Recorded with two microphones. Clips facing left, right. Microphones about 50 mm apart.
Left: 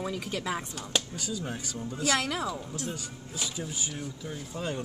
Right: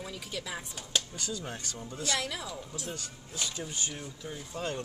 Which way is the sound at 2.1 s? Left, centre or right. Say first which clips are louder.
Left 3 dB; left.